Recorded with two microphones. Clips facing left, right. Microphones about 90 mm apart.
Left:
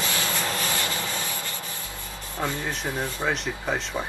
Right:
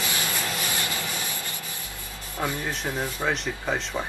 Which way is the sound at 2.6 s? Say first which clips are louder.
Even; centre (ahead or behind).